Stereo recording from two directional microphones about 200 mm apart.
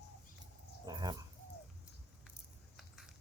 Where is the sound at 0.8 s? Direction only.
20° right (ahead or behind).